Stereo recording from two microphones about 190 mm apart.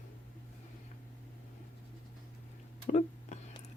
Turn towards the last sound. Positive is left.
turn(degrees=35)  # may be behind; listen again after turning